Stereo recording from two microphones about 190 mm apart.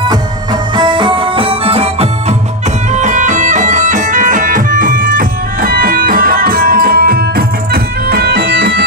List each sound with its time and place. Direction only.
0.7 s music: 25° right (ahead or behind); by 8.8 s 60° right (ahead or behind)